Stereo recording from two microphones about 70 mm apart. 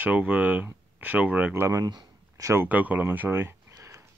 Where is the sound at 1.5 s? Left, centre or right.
Right.